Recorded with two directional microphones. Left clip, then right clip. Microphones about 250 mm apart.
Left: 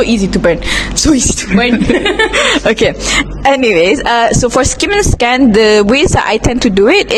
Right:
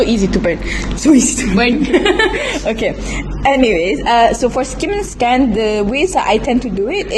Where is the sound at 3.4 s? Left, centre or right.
Left.